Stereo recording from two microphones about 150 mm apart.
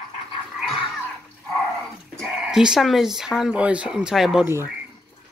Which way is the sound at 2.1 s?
5° right (ahead or behind).